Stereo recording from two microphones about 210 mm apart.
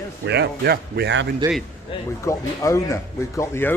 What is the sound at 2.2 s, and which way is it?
Speech, 15° left (ahead or behind).